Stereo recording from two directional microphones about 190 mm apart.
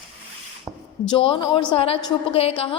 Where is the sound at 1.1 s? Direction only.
25° left (ahead or behind).